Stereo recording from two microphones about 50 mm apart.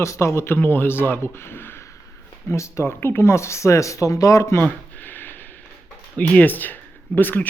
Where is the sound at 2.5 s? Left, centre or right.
Left.